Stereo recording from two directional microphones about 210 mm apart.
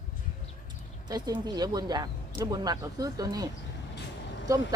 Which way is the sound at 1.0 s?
20° right (ahead or behind).